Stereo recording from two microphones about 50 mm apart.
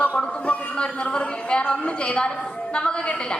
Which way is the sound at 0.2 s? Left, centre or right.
Centre.